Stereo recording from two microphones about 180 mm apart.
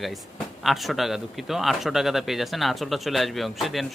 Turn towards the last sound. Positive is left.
turn(degrees=0)  # may be behind; listen again after turning